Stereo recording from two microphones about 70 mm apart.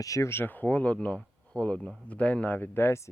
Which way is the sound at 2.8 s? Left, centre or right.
Left.